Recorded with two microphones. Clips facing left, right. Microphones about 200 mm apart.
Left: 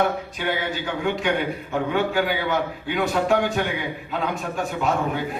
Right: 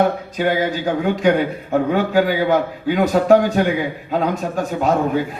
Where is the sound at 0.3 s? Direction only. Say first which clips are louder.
Right 7 dB; 40° right (ahead or behind).